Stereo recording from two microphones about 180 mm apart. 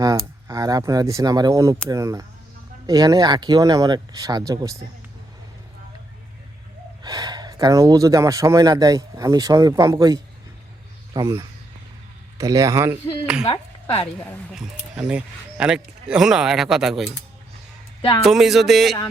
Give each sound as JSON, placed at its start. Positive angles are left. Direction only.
{"t": 0.0, "sound": "speech", "side_deg": -20}
{"t": 7.0, "sound": "speech", "side_deg": -20}
{"t": 13.4, "sound": "speech", "side_deg": 30}
{"t": 14.5, "sound": "speech", "side_deg": -5}
{"t": 18.2, "sound": "speech", "side_deg": 0}